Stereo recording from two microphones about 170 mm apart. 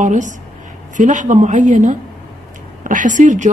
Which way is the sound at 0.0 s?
45° right (ahead or behind).